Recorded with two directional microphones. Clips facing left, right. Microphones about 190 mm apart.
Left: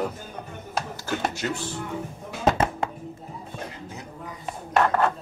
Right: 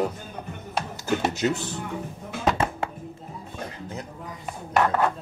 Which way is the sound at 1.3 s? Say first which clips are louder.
Right 5 dB; 20° right (ahead or behind).